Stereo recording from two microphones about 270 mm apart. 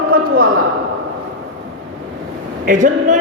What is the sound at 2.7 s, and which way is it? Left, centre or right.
Speech, right.